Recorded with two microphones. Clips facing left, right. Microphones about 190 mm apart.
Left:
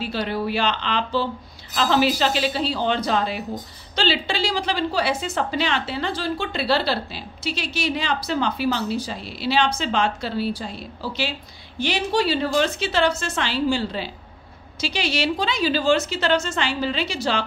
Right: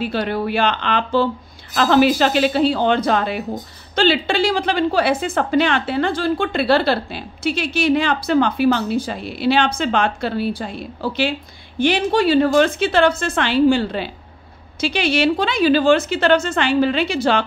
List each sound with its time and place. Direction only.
0.0 s a woman's voice: 55° right (ahead or behind)